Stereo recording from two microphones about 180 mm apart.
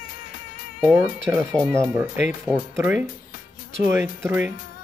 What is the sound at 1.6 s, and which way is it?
Speech, 15° right (ahead or behind).